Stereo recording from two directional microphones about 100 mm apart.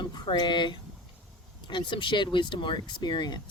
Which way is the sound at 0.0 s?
50° left (ahead or behind).